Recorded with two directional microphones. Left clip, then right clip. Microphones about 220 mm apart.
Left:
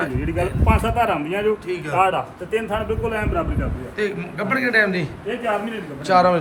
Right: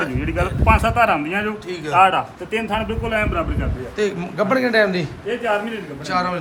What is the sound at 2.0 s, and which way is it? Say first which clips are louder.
Speech: right 5 dB; 40° right (ahead or behind).